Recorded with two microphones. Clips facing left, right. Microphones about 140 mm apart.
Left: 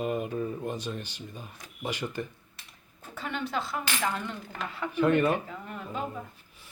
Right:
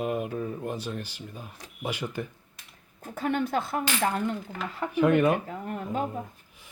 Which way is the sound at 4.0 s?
40° right (ahead or behind).